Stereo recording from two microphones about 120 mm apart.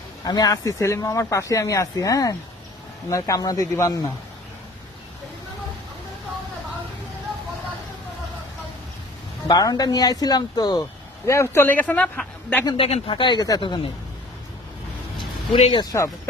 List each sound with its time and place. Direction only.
0.3 s speech: 30° left (ahead or behind)
9.5 s speech: 30° left (ahead or behind)
11.3 s speech: 20° left (ahead or behind)
12.6 s speech: 50° left (ahead or behind)
15.7 s speech: 35° left (ahead or behind)